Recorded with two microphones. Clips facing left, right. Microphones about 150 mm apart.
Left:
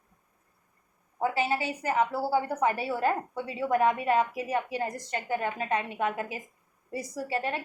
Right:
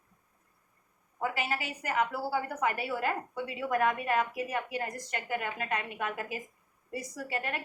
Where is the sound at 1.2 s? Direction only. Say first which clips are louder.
Left 5 dB; 30° left (ahead or behind).